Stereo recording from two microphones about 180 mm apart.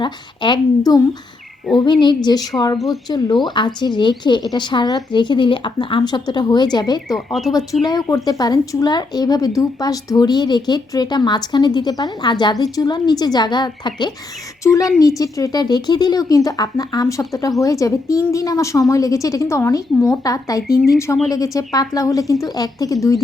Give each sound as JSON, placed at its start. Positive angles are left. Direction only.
{"t": 0.0, "sound": "speech", "side_deg": 25}
{"t": 2.7, "sound": "speech", "side_deg": 0}
{"t": 3.1, "sound": "speech", "side_deg": 25}
{"t": 7.1, "sound": "speech", "side_deg": 0}
{"t": 7.5, "sound": "a woman's voice", "side_deg": 20}
{"t": 20.6, "sound": "speech", "side_deg": 55}
{"t": 21.2, "sound": "speech", "side_deg": 20}